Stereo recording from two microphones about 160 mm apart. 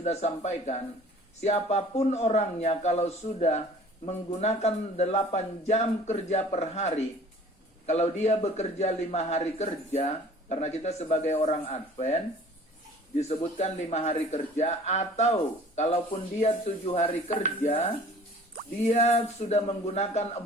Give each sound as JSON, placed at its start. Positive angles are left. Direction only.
{"t": 0.0, "sound": "speech", "side_deg": 45}
{"t": 18.9, "sound": "speech", "side_deg": 40}